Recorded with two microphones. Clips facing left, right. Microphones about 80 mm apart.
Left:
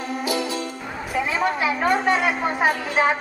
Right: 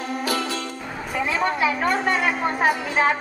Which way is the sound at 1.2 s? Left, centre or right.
Centre.